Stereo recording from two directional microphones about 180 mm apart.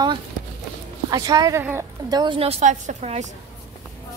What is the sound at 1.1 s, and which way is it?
Speech, 20° right (ahead or behind).